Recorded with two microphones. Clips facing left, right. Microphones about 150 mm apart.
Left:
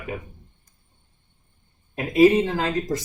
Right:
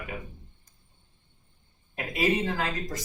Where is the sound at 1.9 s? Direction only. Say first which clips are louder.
Left 11 dB; 30° left (ahead or behind).